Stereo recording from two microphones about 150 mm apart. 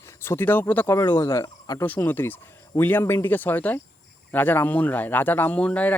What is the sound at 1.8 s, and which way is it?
Speech, 10° left (ahead or behind).